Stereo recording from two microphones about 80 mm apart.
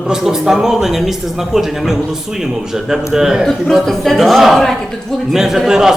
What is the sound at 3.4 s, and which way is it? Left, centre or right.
Speech, centre.